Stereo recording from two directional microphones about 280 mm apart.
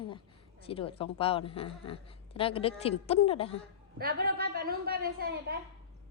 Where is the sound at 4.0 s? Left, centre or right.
Right.